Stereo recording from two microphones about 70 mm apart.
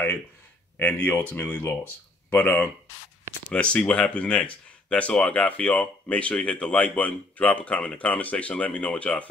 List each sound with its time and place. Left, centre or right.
0.7 s speech: left